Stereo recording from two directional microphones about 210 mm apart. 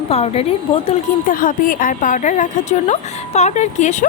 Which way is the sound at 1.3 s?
40° left (ahead or behind).